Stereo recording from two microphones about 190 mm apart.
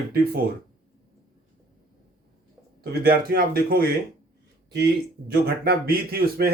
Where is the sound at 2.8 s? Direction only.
55° right (ahead or behind).